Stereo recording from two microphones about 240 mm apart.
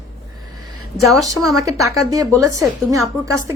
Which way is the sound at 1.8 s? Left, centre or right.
Right.